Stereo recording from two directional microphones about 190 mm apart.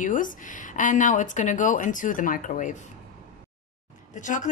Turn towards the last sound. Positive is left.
turn(degrees=40)  # may be behind; listen again after turning